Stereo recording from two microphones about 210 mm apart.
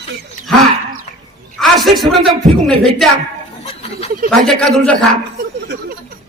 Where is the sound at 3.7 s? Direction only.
30° left (ahead or behind).